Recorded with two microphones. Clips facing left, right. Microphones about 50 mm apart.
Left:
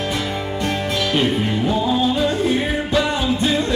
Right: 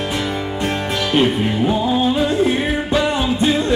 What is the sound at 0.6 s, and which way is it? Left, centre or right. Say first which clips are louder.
Music: even; centre.